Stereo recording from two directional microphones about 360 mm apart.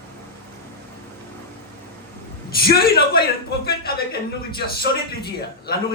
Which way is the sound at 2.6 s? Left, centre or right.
Left.